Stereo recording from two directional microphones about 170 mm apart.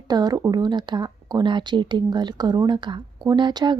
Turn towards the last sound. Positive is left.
turn(degrees=-25)  # may be behind; listen again after turning